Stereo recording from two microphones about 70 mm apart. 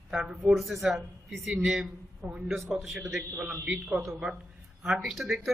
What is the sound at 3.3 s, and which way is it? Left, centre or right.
Speech, centre.